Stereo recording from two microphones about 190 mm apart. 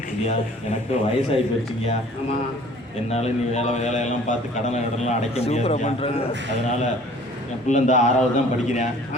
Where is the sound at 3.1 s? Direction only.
35° left (ahead or behind).